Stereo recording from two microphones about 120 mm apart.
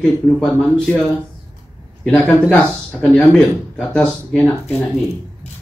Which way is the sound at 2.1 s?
10° left (ahead or behind).